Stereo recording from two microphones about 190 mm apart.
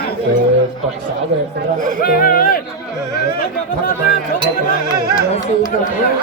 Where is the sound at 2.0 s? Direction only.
50° left (ahead or behind).